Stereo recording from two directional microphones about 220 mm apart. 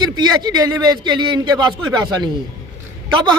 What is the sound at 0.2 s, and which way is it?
A man's voice, 20° right (ahead or behind).